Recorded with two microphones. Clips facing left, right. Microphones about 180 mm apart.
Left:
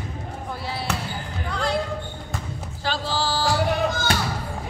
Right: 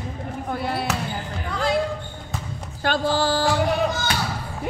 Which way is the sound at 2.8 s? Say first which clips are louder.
Right 5 dB; 55° right (ahead or behind).